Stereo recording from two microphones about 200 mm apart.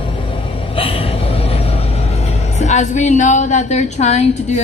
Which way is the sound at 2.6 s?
35° left (ahead or behind).